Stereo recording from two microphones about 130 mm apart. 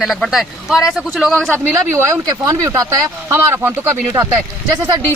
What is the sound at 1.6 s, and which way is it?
Speech, 20° right (ahead or behind).